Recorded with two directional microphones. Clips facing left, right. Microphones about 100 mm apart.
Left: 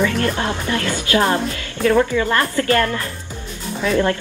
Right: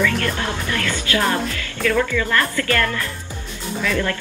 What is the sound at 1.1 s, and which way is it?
Speech, 30° left (ahead or behind).